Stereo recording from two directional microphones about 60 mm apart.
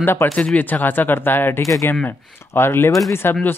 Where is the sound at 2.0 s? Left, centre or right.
Left.